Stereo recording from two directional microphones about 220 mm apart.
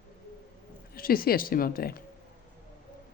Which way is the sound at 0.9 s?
40° left (ahead or behind).